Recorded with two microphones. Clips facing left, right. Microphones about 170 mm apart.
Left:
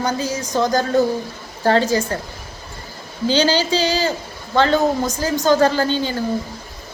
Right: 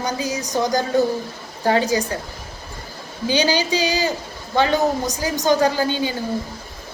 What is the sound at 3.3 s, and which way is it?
A woman's voice, 15° right (ahead or behind).